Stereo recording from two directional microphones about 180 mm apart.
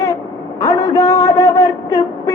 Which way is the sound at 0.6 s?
20° left (ahead or behind).